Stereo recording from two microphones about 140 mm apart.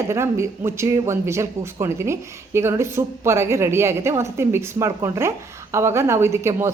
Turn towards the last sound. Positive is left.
turn(degrees=-20)  # may be behind; listen again after turning